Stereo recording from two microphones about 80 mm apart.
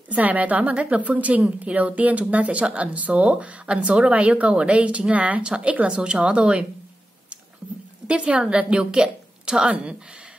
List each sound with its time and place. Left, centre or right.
0.1 s a woman's voice: centre
8.1 s a woman's voice: centre